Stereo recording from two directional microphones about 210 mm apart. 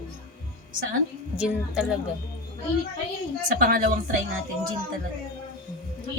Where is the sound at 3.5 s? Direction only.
40° right (ahead or behind).